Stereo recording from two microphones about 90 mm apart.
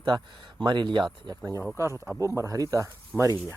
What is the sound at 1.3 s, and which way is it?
Speech, 40° right (ahead or behind).